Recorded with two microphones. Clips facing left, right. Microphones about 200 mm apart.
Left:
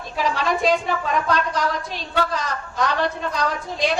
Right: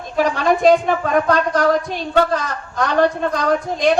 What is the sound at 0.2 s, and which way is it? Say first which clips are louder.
A woman's voice: right 6 dB; 50° right (ahead or behind).